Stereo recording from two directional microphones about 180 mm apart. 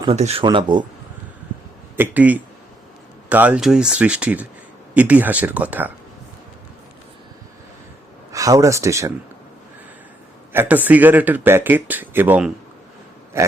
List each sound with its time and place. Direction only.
0.1 s speech: 35° right (ahead or behind)
2.0 s speech: 10° right (ahead or behind)
8.3 s speech: 20° right (ahead or behind)
10.5 s speech: 10° right (ahead or behind)